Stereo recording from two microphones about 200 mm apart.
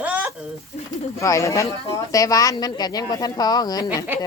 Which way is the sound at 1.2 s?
15° left (ahead or behind).